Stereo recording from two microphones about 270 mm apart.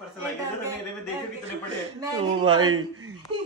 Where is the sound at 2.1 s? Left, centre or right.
Centre.